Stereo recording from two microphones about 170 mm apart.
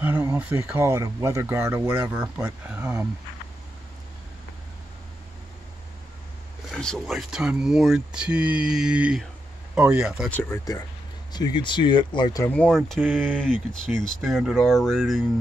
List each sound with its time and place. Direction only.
0.0 s speech: 15° right (ahead or behind)
6.7 s speech: centre (ahead or behind)
10.3 s speech: 20° left (ahead or behind)
12.4 s speech: 5° left (ahead or behind)